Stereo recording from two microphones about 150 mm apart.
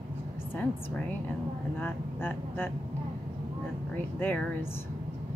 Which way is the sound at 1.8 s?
15° left (ahead or behind).